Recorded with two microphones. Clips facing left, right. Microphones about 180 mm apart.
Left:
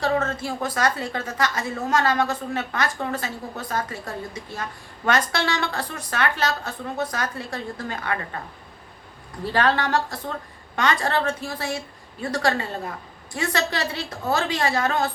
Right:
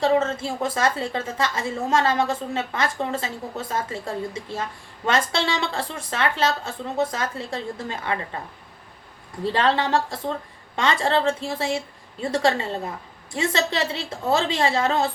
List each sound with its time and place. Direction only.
0.0 s a woman's voice: 25° right (ahead or behind)
9.4 s a woman's voice: 25° right (ahead or behind)